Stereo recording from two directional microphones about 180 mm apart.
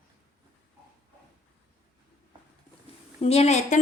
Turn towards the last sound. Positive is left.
turn(degrees=35)  # may be behind; listen again after turning